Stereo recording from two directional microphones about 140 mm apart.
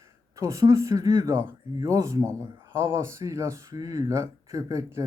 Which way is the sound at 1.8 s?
20° right (ahead or behind).